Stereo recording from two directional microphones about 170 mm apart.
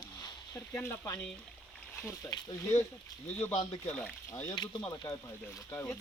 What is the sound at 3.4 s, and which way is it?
Speech, 10° left (ahead or behind).